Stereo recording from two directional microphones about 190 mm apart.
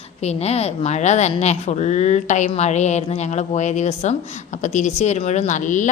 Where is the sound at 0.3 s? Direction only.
35° left (ahead or behind).